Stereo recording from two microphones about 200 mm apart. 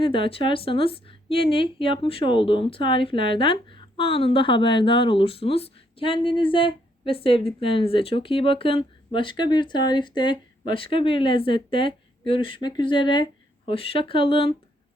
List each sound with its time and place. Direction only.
0.0 s a woman's voice: 25° left (ahead or behind)